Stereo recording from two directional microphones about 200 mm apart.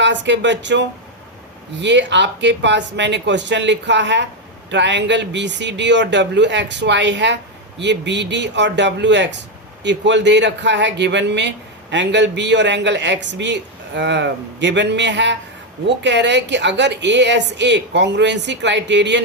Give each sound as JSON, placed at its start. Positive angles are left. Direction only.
{"t": 0.0, "sound": "a man's voice", "side_deg": -60}